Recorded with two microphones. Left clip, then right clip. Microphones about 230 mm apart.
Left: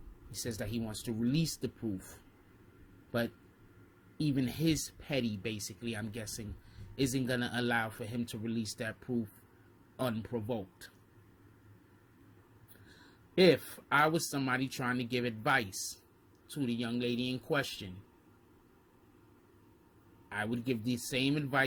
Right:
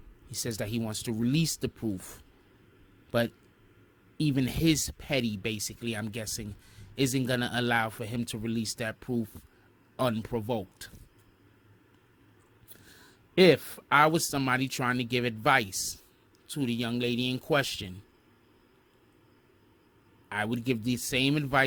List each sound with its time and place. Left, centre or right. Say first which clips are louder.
0.3 s speech: right 5 dB; right
3.1 s a man's voice: right 7 dB; right
13.3 s speech: right 5 dB; right
20.3 s speech: right 5 dB; right